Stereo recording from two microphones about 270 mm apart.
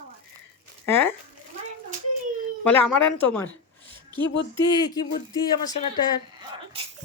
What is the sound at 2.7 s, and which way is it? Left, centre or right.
Speech, centre.